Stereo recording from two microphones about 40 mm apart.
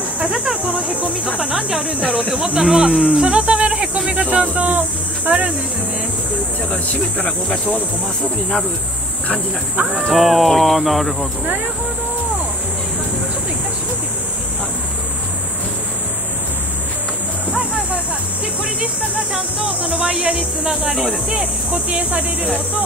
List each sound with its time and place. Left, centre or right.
0.2 s snake: right
1.4 s speech: right
6.7 s speech: left
10.1 s speech: centre
18.8 s speech: right